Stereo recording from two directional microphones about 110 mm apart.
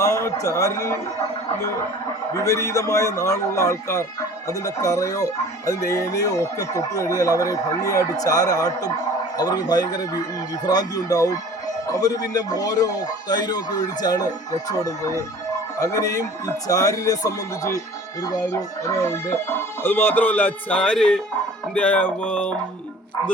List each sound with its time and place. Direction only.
0.0 s speech: 25° left (ahead or behind)
2.3 s a man's voice: 30° left (ahead or behind); by 21.2 s 10° left (ahead or behind)
21.8 s music: 15° left (ahead or behind)